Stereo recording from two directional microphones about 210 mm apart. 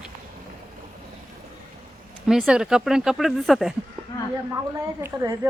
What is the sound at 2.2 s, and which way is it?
Speech, 5° right (ahead or behind).